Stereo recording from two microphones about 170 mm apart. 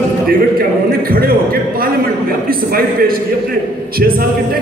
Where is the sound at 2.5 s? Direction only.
60° right (ahead or behind).